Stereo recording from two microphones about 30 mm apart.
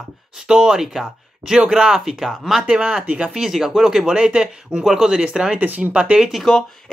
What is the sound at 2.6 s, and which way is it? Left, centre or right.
Speech, right.